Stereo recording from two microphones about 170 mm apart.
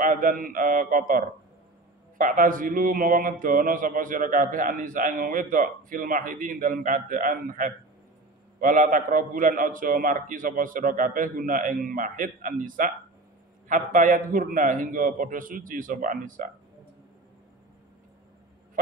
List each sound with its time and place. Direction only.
0.0 s a man's voice: 55° right (ahead or behind)